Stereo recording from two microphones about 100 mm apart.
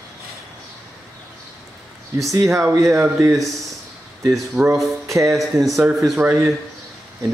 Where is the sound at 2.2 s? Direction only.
30° right (ahead or behind).